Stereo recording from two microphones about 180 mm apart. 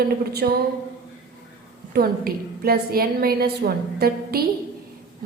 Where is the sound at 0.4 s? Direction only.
55° right (ahead or behind).